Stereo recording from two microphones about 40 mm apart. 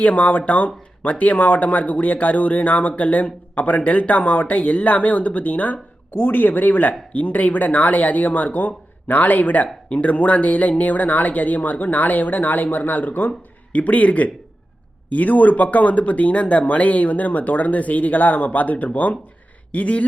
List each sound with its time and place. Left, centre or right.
0.0 s speech: left
13.7 s speech: left